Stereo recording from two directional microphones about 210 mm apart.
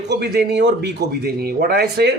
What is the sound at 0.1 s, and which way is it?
Speech, 50° right (ahead or behind).